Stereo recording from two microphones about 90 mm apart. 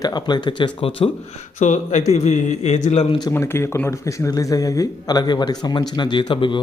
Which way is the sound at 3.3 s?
30° left (ahead or behind).